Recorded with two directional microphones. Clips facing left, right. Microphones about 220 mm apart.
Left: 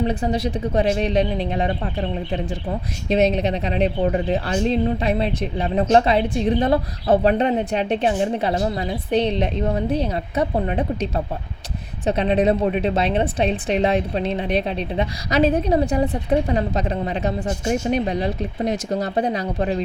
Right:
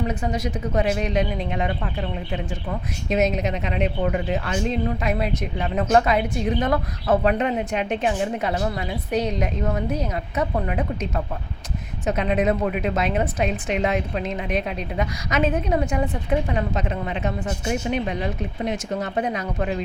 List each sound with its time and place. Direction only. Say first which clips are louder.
0.0 s a woman's voice: left 4 dB; 35° left (ahead or behind)